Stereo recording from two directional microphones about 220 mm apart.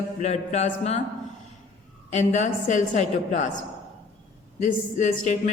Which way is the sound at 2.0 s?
35° left (ahead or behind).